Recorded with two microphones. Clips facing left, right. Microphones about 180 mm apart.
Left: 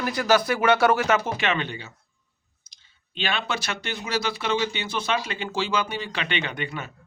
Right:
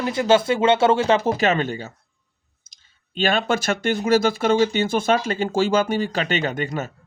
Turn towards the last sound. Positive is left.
turn(degrees=-45)  # may be behind; listen again after turning